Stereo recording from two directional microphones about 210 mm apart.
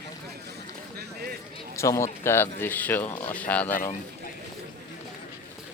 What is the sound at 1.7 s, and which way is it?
Speech, 15° left (ahead or behind).